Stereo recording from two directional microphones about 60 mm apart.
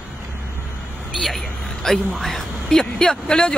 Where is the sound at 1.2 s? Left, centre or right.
Centre.